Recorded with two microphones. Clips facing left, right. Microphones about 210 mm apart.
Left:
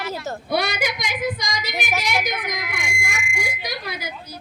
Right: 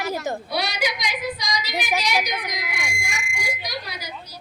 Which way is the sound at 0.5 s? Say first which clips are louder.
Left 7 dB; 50° left (ahead or behind).